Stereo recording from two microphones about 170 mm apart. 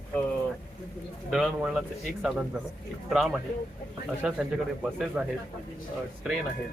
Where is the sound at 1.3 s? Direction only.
Centre (ahead or behind).